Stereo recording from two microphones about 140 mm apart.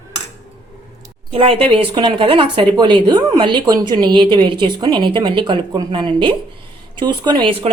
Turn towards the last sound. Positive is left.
turn(degrees=-35)  # may be behind; listen again after turning